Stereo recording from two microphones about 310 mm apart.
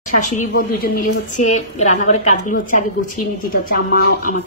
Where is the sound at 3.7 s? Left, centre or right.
Left.